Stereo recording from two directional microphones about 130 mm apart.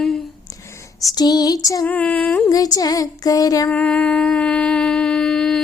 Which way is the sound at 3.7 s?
10° left (ahead or behind).